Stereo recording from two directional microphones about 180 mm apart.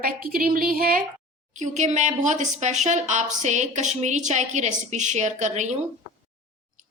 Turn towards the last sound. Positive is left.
turn(degrees=-40)  # may be behind; listen again after turning